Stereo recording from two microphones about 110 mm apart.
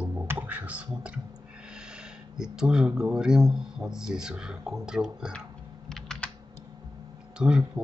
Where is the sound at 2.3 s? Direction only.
5° right (ahead or behind).